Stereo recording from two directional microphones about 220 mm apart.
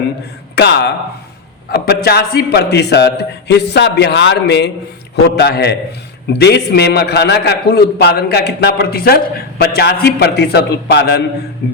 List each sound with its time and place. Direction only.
0.5 s a man's voice: 50° left (ahead or behind)